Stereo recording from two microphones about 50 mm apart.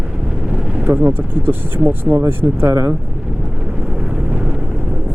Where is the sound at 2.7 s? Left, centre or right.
Right.